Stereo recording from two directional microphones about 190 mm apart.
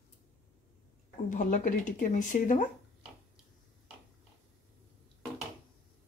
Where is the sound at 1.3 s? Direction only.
45° left (ahead or behind).